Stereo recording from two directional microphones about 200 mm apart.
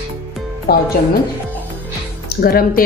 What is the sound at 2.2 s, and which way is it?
Speech, 50° left (ahead or behind).